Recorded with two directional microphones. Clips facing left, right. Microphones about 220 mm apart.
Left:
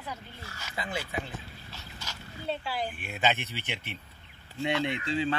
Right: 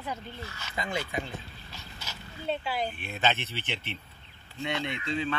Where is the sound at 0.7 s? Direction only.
5° left (ahead or behind).